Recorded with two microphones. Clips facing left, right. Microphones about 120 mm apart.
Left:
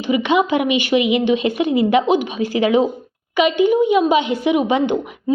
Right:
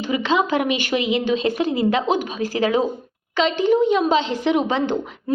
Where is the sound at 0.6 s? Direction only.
45° right (ahead or behind).